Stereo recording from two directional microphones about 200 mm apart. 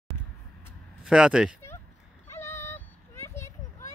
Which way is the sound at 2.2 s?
15° left (ahead or behind).